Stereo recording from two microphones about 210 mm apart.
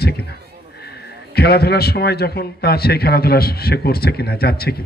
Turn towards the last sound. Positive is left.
turn(degrees=50)  # may be behind; listen again after turning